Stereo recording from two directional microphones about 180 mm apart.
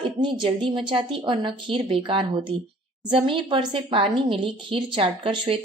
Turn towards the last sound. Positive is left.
turn(degrees=-30)  # may be behind; listen again after turning